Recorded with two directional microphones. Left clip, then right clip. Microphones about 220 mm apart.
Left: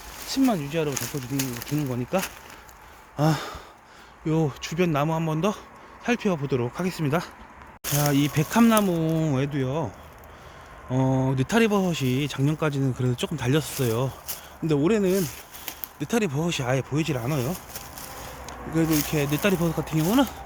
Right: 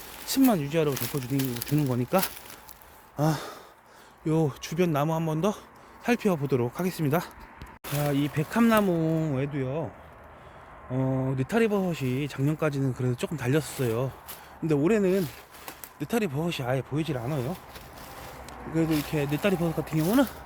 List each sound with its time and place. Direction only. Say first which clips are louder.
0.3 s speech: even; 30° right (ahead or behind)
3.2 s sigh: left 3 dB; centre (ahead or behind)
4.3 s speech: left 1 dB; 5° right (ahead or behind)
8.0 s speech: left 4 dB; 15° left (ahead or behind); by 9.2 s centre (ahead or behind)
9.2 s speech: left 4 dB; 20° left (ahead or behind)
10.9 s speech: left 4 dB; 15° left (ahead or behind)
18.4 s speech: left 3 dB; centre (ahead or behind)